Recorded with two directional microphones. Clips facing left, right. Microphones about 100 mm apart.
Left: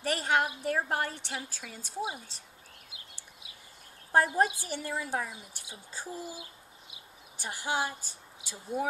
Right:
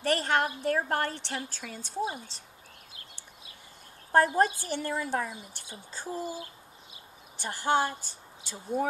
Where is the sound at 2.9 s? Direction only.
15° left (ahead or behind).